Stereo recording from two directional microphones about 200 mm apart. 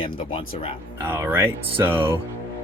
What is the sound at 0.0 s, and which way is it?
Speech, 25° left (ahead or behind).